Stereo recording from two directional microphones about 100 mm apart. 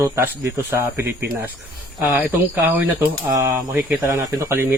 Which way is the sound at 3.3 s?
30° right (ahead or behind).